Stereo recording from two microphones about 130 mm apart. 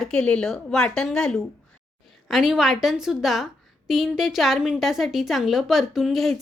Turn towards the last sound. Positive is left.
turn(degrees=0)  # may be behind; listen again after turning